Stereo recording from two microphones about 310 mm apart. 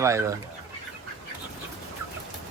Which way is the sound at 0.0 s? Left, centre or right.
Centre.